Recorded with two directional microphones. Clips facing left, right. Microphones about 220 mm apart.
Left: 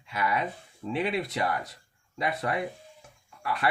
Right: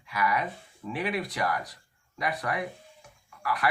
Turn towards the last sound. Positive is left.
turn(degrees=25)  # may be behind; listen again after turning